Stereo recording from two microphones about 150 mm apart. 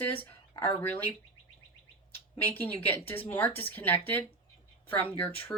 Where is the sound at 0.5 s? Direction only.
35° left (ahead or behind).